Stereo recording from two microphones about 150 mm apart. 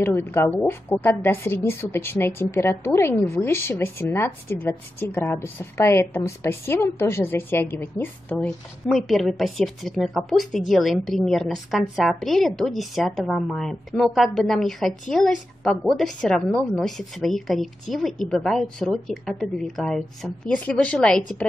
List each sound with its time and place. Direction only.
0.0 s a woman's voice: 15° left (ahead or behind)